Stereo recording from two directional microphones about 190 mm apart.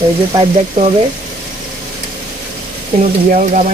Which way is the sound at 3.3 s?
40° right (ahead or behind).